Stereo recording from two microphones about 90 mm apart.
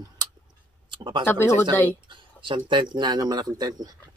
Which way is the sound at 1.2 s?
25° left (ahead or behind).